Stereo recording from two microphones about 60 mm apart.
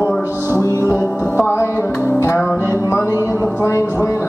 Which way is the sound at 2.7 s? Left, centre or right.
Left.